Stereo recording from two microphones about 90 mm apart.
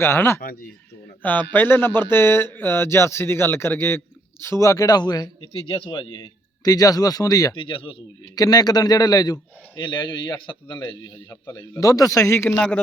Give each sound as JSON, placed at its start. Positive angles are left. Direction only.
{"t": 0.0, "sound": "speech", "side_deg": 25}
{"t": 5.4, "sound": "speech", "side_deg": 85}
{"t": 5.9, "sound": "a man's voice", "side_deg": 55}
{"t": 7.5, "sound": "speech", "side_deg": 70}
{"t": 8.4, "sound": "a man's voice", "side_deg": 45}
{"t": 11.3, "sound": "a man's voice", "side_deg": 30}